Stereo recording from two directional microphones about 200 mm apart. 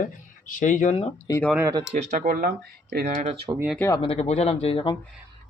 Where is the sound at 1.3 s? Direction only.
10° left (ahead or behind).